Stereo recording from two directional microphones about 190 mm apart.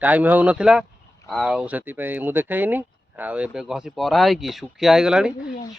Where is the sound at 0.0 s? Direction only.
10° right (ahead or behind).